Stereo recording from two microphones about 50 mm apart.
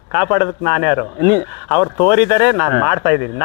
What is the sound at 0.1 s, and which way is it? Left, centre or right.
Speech, centre.